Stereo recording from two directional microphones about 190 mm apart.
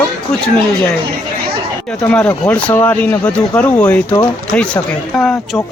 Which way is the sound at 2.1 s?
10° left (ahead or behind).